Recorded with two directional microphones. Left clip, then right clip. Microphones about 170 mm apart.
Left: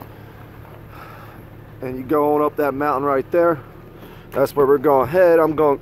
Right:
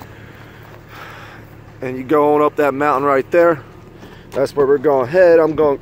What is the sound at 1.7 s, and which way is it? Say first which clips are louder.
Speech: right 4 dB; 15° right (ahead or behind).